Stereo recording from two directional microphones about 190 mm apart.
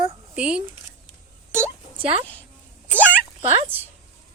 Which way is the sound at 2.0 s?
30° right (ahead or behind).